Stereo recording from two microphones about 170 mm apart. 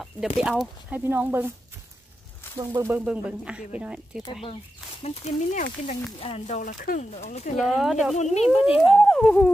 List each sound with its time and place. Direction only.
0.0 s speech: 5° right (ahead or behind)
2.6 s speech: 20° right (ahead or behind)
5.0 s speech: 40° left (ahead or behind)
7.5 s speech: centre (ahead or behind)
8.2 s speech: 40° left (ahead or behind)
8.9 s speech: 5° left (ahead or behind)